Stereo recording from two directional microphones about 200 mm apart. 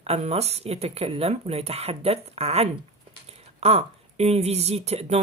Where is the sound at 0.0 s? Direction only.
30° right (ahead or behind).